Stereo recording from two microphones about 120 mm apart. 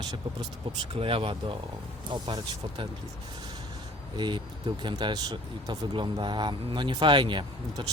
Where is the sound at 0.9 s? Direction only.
50° right (ahead or behind).